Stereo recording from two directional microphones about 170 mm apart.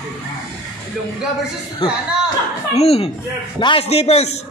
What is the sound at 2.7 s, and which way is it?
A man's voice, 35° left (ahead or behind).